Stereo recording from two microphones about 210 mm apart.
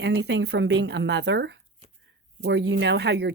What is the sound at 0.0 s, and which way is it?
A woman's voice, 55° right (ahead or behind).